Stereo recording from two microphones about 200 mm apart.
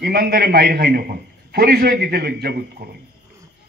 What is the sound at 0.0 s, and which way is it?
A man's voice, 50° right (ahead or behind).